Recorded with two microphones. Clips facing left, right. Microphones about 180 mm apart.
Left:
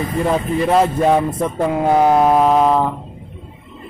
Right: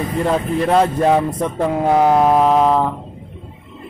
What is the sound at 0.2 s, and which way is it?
Speech, centre (ahead or behind).